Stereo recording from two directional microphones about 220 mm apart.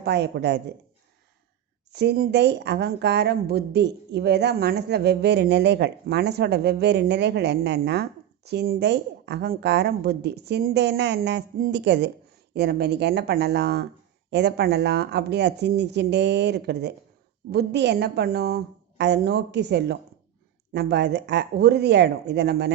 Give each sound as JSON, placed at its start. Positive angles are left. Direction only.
{"t": 0.0, "sound": "a woman's voice", "side_deg": -50}
{"t": 1.9, "sound": "a woman's voice", "side_deg": -50}